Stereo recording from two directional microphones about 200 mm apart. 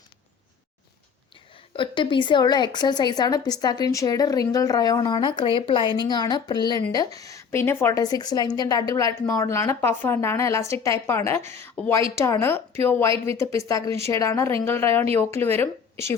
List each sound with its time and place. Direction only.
1.7 s a woman's voice: 25° left (ahead or behind)